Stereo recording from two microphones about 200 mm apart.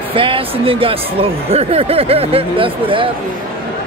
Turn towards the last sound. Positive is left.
turn(degrees=-25)  # may be behind; listen again after turning